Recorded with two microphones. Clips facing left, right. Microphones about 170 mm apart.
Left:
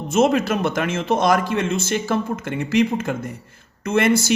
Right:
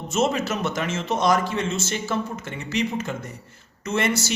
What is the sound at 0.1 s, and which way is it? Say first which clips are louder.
Speech: left 6 dB; 55° left (ahead or behind).